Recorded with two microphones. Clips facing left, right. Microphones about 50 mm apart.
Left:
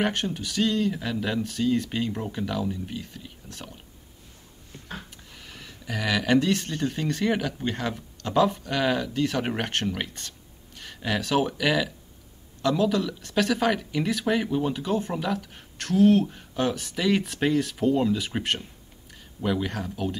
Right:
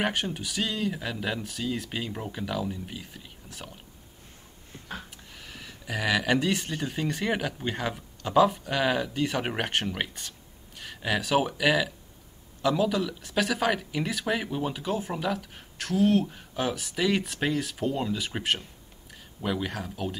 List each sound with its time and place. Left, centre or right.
0.0 s speech: centre
5.1 s speech: centre